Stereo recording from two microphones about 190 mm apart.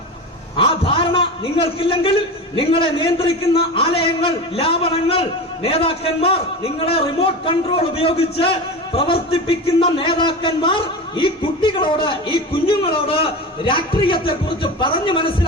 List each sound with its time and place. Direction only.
0.5 s a man's voice: 30° left (ahead or behind)